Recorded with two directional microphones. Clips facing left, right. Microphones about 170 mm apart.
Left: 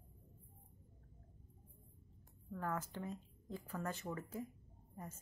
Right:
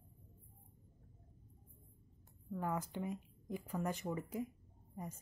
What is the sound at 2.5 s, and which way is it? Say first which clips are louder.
Speech: right 3 dB; 15° right (ahead or behind).